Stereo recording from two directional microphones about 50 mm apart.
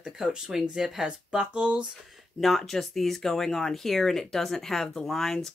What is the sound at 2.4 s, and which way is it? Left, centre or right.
Speech, centre.